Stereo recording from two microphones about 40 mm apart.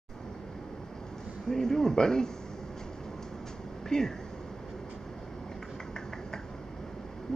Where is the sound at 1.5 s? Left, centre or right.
Centre.